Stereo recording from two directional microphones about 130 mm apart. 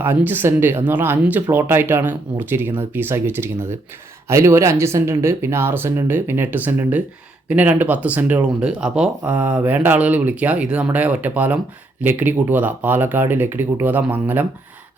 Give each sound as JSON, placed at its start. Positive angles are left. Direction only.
{"t": 0.0, "sound": "speech", "side_deg": -15}